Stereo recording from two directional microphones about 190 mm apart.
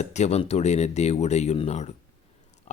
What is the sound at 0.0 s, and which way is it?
Speech, 40° left (ahead or behind).